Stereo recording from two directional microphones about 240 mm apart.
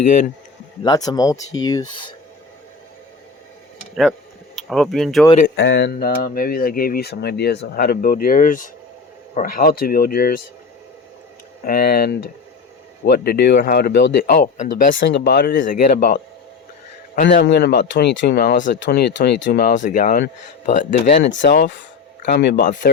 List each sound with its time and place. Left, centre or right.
0.8 s speech: centre
4.5 s speech: centre
5.5 s speech: left
11.6 s speech: left
14.9 s speech: left
17.2 s speech: left
21.4 s speech: left